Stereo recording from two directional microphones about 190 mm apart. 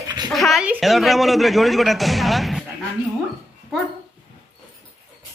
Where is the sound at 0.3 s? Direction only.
Centre (ahead or behind).